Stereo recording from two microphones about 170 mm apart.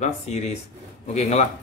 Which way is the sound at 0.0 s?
40° left (ahead or behind).